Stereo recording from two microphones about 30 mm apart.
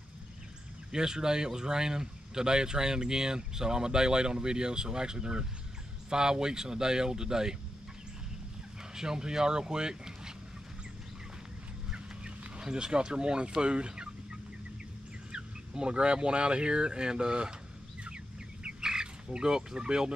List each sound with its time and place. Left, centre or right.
0.9 s speech: right
8.9 s speech: right
11.9 s chicken: right
13.6 s speech: right
15.3 s a sound: right
15.9 s speech: right
18.0 s bird: right